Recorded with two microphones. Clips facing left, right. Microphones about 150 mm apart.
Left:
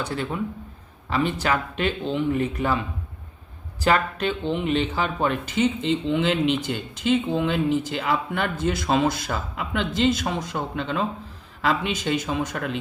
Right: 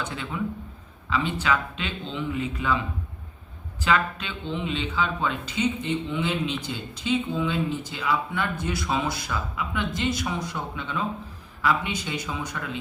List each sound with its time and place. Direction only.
0.0 s speech: 40° left (ahead or behind)
1.1 s speech: 50° left (ahead or behind)
3.8 s speech: 45° left (ahead or behind)
4.4 s speech: 65° left (ahead or behind)